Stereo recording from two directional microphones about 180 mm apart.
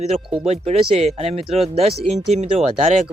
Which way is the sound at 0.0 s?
35° right (ahead or behind).